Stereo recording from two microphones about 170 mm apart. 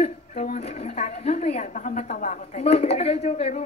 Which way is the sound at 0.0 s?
40° left (ahead or behind).